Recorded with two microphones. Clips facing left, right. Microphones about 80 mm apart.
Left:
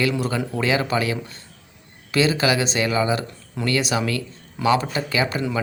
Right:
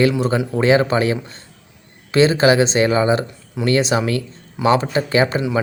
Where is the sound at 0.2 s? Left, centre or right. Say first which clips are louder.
Right 6 dB; right.